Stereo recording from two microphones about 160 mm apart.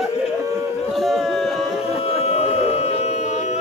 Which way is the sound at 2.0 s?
40° left (ahead or behind).